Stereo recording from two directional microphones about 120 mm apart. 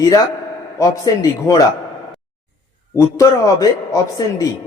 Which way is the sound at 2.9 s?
25° left (ahead or behind).